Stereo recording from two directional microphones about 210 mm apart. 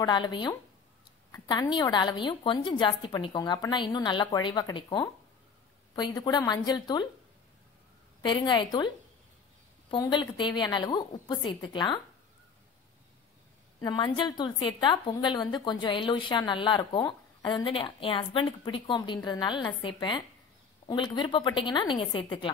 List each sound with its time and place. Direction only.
0.0 s speech: 20° left (ahead or behind)
8.2 s speech: 20° left (ahead or behind)
13.8 s speech: 20° left (ahead or behind)